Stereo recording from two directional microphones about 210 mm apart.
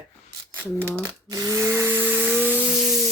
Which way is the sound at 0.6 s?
10° right (ahead or behind).